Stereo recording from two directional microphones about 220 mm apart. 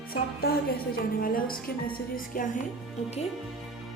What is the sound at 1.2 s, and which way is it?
Speech, 40° left (ahead or behind).